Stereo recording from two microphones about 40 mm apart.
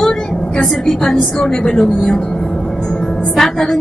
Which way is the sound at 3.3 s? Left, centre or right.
Centre.